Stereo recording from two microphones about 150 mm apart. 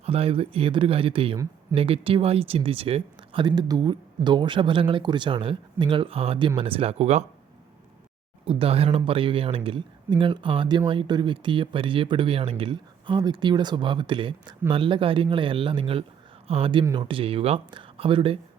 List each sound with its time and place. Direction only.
0.0 s speech: 40° right (ahead or behind)
8.4 s speech: 40° right (ahead or behind)